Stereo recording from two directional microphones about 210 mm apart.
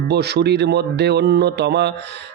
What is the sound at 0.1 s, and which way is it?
Speech, 50° right (ahead or behind).